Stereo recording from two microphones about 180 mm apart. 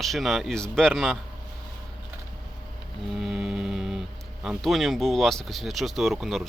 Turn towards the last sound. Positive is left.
turn(degrees=0)  # may be behind; listen again after turning